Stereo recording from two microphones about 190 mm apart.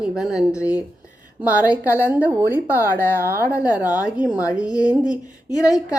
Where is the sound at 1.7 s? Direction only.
10° right (ahead or behind).